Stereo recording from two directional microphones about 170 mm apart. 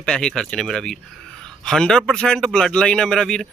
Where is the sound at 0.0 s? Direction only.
5° left (ahead or behind).